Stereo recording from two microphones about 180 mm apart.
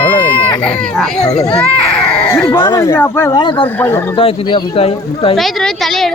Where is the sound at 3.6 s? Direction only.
10° left (ahead or behind).